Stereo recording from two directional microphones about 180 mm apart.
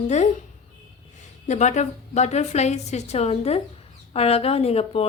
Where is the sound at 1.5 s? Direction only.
40° left (ahead or behind).